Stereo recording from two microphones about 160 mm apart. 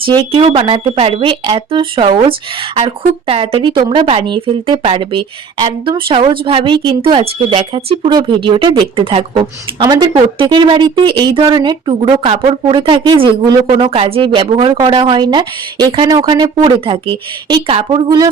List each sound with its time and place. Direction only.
0.1 s speech: 30° right (ahead or behind)